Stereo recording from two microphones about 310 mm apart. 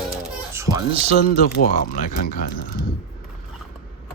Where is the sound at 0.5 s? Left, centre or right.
Centre.